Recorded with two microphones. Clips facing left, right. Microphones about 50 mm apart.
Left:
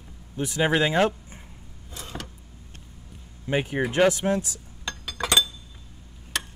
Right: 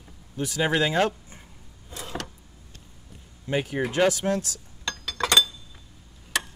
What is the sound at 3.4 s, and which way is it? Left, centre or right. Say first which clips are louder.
Speech: left 1 dB; centre.